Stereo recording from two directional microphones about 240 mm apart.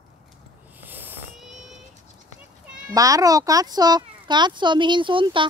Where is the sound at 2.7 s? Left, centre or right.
Centre.